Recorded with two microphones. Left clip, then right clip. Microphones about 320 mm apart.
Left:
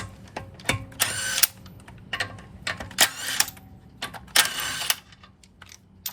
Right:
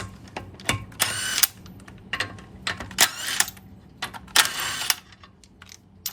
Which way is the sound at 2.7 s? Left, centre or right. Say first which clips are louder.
Even; centre.